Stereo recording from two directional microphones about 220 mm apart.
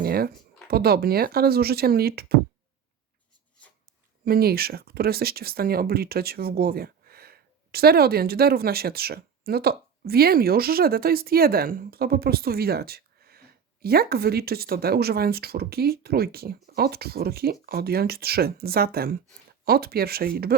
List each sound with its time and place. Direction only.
0.0 s a sound: 45° right (ahead or behind)
0.7 s speech: 45° right (ahead or behind)
4.3 s speech: 45° right (ahead or behind)